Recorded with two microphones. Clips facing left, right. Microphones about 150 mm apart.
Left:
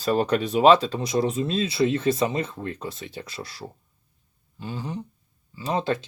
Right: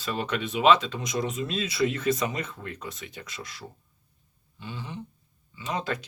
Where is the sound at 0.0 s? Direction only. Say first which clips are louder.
Left 8 dB; 40° left (ahead or behind).